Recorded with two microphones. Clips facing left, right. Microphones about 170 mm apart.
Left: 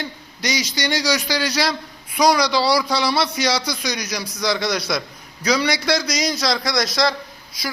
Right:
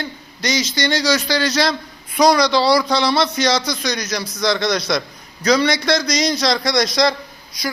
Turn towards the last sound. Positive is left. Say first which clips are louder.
# right 3 dB
turn(degrees=0)  # may be behind; listen again after turning